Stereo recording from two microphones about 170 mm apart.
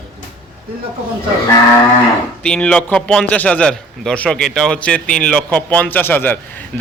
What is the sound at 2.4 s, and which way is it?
A man's voice, 5° left (ahead or behind).